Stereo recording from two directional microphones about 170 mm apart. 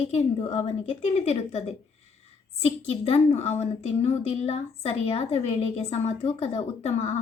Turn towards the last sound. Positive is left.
turn(degrees=40)  # may be behind; listen again after turning